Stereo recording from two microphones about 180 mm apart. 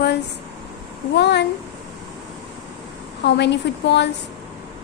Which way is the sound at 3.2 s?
70° left (ahead or behind).